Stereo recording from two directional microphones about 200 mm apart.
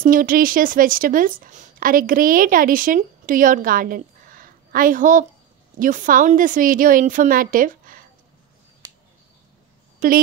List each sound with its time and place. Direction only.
0.0 s a woman's voice: 45° right (ahead or behind)
10.0 s a woman's voice: 45° right (ahead or behind)